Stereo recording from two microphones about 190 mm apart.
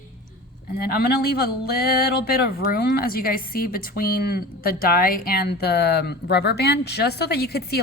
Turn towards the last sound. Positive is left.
turn(degrees=55)  # may be behind; listen again after turning